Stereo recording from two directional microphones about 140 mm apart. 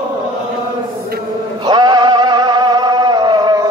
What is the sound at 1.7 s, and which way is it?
Music, 30° right (ahead or behind).